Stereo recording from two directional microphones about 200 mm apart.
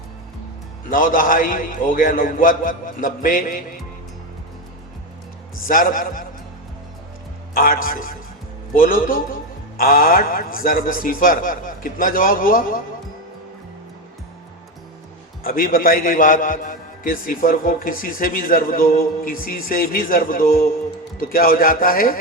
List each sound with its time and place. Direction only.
0.9 s a man's voice: 45° left (ahead or behind)
5.6 s a man's voice: 45° left (ahead or behind)
7.5 s a man's voice: 45° left (ahead or behind)
15.4 s a man's voice: 45° left (ahead or behind)